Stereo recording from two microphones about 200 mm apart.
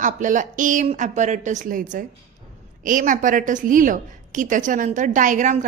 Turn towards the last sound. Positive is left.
turn(degrees=-40)  # may be behind; listen again after turning